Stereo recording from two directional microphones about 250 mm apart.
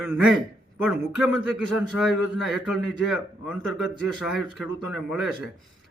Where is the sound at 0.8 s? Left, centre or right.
Centre.